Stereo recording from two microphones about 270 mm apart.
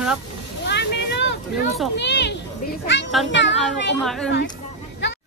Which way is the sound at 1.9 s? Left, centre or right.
Left.